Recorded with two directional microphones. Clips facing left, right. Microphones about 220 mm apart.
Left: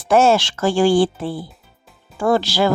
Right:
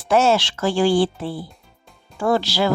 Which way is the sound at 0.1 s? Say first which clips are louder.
Left 3 dB; 50° left (ahead or behind).